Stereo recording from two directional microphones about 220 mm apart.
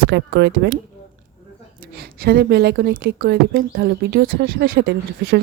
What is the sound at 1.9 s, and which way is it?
Speech, 45° right (ahead or behind).